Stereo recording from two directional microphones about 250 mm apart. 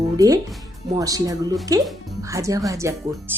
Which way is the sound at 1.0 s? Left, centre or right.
Centre.